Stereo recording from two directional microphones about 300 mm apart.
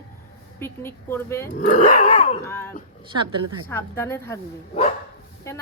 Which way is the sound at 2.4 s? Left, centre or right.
Centre.